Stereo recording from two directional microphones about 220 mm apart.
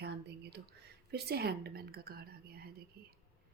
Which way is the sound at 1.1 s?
45° right (ahead or behind).